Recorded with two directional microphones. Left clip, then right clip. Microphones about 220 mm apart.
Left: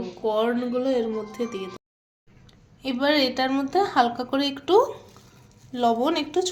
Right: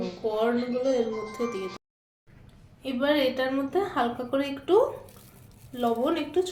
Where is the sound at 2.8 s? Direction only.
55° left (ahead or behind).